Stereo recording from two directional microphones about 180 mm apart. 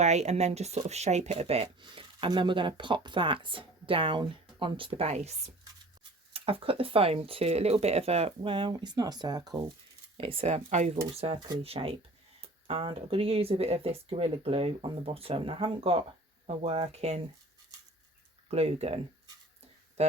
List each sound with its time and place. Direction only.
0.0 s speech: 40° right (ahead or behind)
6.3 s speech: 30° right (ahead or behind)
10.2 s speech: 30° right (ahead or behind)
18.5 s speech: 35° right (ahead or behind)
20.0 s speech: 35° right (ahead or behind)